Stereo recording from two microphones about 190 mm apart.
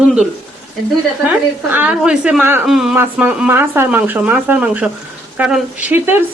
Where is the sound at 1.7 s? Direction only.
10° right (ahead or behind).